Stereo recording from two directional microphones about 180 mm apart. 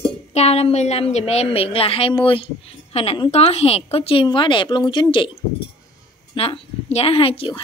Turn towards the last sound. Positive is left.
turn(degrees=30)  # may be behind; listen again after turning